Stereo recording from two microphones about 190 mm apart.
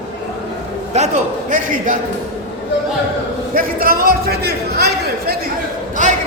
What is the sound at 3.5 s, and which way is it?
A man's voice, 50° right (ahead or behind).